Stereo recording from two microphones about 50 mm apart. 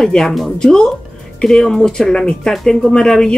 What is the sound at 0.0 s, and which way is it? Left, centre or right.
Speech, centre.